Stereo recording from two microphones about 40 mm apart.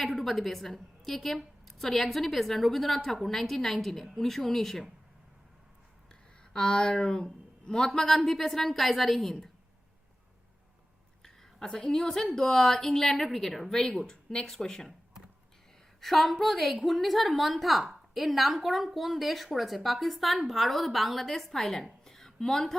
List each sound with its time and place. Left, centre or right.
0.0 s a woman's voice: centre
6.5 s a woman's voice: centre
11.2 s a woman's voice: centre
16.0 s a woman's voice: centre
22.0 s a sound: centre